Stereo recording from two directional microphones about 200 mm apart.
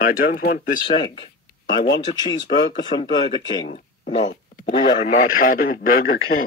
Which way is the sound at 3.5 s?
25° left (ahead or behind).